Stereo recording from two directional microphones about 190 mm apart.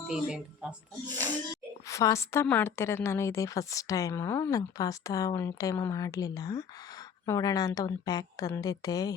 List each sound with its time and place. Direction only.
0.1 s speech: 5° right (ahead or behind)
1.9 s a woman's voice: 15° left (ahead or behind)